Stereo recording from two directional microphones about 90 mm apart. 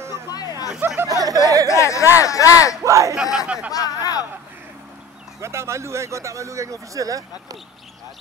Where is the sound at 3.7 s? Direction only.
45° left (ahead or behind).